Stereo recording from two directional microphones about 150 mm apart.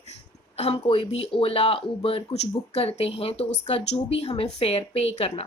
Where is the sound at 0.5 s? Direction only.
45° left (ahead or behind).